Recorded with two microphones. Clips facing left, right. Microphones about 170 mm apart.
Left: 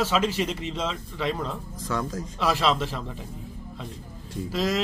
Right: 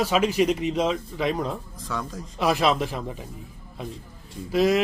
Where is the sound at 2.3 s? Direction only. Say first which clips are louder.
Right 3 dB; 15° right (ahead or behind).